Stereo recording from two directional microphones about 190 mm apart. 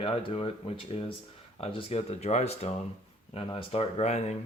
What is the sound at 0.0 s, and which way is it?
Speech, 30° left (ahead or behind).